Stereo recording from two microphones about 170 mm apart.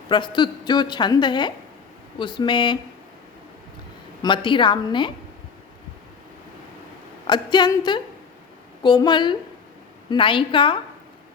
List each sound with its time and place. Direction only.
0.1 s a woman's voice: 25° left (ahead or behind)
4.2 s a woman's voice: 30° left (ahead or behind)
7.3 s a woman's voice: 25° left (ahead or behind)